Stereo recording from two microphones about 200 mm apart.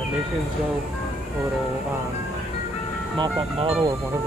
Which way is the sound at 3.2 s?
25° right (ahead or behind).